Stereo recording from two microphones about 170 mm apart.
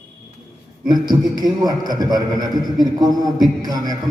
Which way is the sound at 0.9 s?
25° right (ahead or behind).